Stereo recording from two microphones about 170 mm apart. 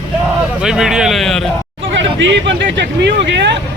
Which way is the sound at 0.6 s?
5° right (ahead or behind).